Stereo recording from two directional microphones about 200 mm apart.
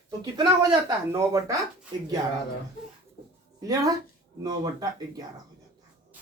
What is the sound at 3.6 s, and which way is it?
Speech, 20° right (ahead or behind).